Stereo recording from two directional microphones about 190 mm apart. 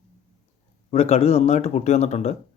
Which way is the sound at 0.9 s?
35° left (ahead or behind).